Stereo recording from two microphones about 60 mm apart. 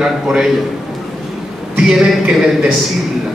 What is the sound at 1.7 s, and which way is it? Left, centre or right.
Speech, centre.